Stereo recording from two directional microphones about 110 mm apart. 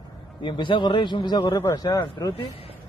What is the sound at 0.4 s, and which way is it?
A man's voice, 45° left (ahead or behind).